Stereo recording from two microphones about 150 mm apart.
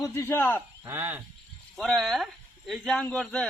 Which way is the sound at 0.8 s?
15° right (ahead or behind).